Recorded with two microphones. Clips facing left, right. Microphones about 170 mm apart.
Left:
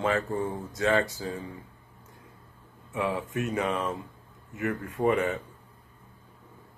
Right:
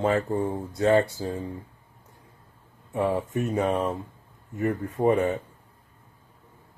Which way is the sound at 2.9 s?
40° right (ahead or behind).